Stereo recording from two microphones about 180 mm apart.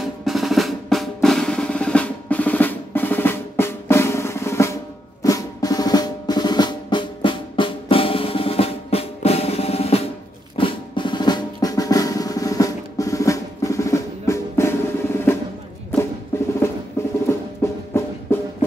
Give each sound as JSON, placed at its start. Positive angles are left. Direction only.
{"t": 0.2, "sound": "drum roll", "side_deg": 0}
{"t": 5.2, "sound": "drum", "side_deg": 20}
{"t": 17.0, "sound": "music", "side_deg": 15}